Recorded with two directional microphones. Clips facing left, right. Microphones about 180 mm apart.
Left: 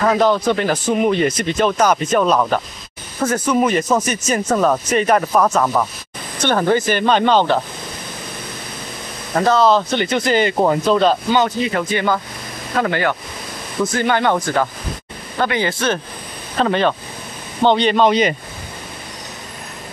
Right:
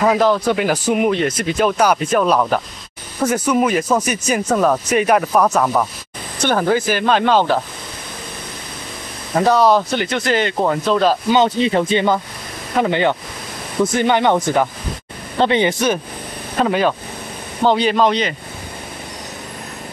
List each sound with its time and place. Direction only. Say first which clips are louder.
0.0 s speech: even; 5° right (ahead or behind)
3.6 s speech: even; 5° right (ahead or behind)
9.4 s speech: right 1 dB; 15° right (ahead or behind); by 11.0 s 5° left (ahead or behind)
11.0 s speech: even; 5° right (ahead or behind)
11.3 s speech: right 3 dB; 25° right (ahead or behind); by 18.2 s centre (ahead or behind)